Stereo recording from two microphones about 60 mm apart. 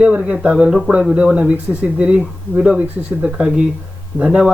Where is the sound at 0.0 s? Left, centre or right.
Centre.